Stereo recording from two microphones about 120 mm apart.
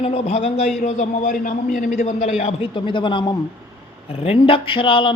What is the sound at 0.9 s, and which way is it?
A man's voice, 90° left.